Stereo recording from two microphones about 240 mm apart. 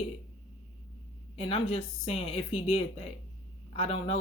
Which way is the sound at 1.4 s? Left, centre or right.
Left.